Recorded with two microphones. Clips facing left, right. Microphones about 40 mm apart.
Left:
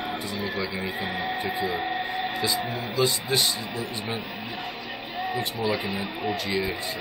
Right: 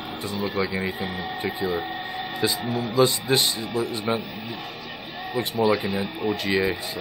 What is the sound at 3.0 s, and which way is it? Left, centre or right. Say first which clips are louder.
Speech: right 3 dB; right.